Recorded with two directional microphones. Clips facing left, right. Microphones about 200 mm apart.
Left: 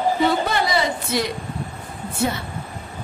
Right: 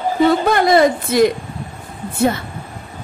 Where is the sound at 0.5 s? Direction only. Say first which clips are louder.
Right 9 dB; 50° right (ahead or behind).